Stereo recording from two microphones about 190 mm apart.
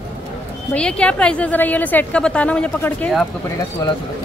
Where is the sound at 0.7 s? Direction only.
5° left (ahead or behind).